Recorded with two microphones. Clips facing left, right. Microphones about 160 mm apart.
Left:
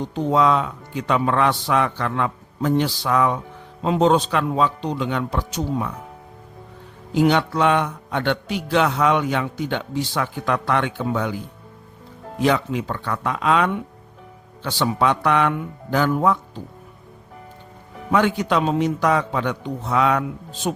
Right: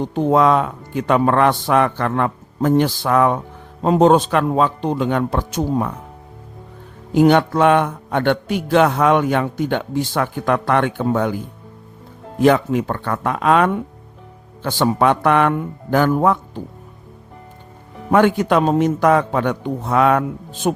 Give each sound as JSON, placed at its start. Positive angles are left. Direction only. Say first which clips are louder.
{"t": 0.0, "sound": "a man's voice", "louder": "right 4 dB", "side_deg": -55}
{"t": 7.1, "sound": "a man's voice", "louder": "right 5 dB", "side_deg": -50}
{"t": 18.1, "sound": "a man's voice", "louder": "right 5 dB", "side_deg": -50}